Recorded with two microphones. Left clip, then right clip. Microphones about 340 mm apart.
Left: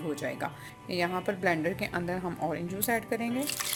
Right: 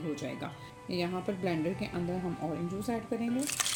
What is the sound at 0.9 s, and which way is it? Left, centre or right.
Speech, left.